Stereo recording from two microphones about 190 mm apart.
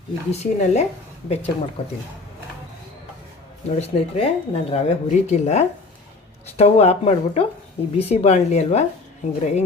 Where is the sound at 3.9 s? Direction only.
35° left (ahead or behind).